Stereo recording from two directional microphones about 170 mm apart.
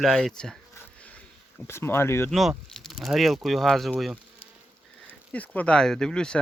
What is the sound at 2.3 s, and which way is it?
Speech, centre (ahead or behind).